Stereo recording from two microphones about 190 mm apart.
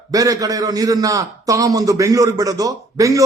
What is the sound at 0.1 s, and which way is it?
A man's voice, 20° right (ahead or behind).